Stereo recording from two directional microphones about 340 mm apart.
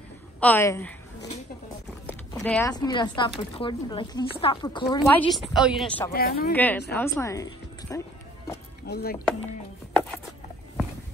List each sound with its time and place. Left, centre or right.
0.4 s a woman's voice: centre
2.0 s speech: centre
6.1 s speech: left
6.5 s speech: centre
8.8 s speech: left